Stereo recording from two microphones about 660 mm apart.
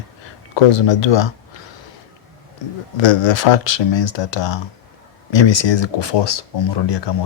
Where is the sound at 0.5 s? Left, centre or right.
Left.